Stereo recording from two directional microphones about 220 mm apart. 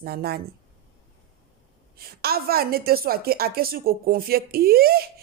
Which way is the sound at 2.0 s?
45° right (ahead or behind).